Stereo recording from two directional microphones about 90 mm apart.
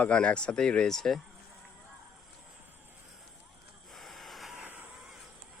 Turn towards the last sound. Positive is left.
turn(degrees=-15)  # may be behind; listen again after turning